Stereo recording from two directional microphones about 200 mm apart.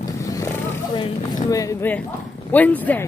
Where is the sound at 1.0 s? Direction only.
15° left (ahead or behind).